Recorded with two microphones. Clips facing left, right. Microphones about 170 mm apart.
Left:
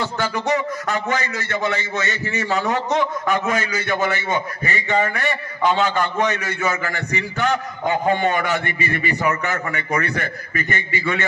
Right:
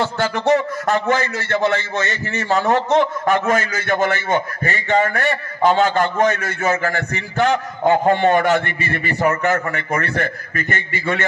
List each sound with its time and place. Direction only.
0.0 s a man's voice: 50° right (ahead or behind)